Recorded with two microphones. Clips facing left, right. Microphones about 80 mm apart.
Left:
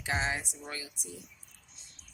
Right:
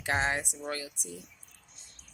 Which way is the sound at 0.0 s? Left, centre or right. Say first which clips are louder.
Right 3 dB; right.